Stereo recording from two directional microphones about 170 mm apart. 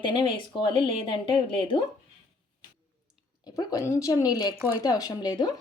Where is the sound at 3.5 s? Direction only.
20° left (ahead or behind).